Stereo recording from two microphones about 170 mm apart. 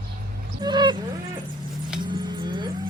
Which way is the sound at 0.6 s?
25° right (ahead or behind).